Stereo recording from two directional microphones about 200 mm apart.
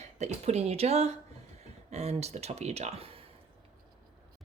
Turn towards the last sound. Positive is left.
turn(degrees=-30)  # may be behind; listen again after turning